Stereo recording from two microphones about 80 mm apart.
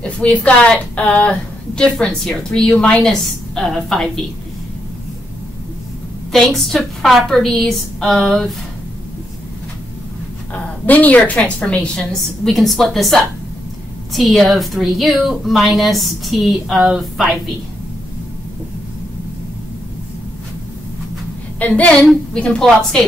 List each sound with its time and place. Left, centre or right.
0.0 s a woman's voice: centre
6.3 s a woman's voice: centre
10.5 s a woman's voice: left; by 17.3 s centre
21.5 s a woman's voice: centre